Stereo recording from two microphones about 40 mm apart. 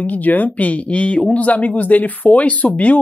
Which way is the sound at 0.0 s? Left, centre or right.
Left.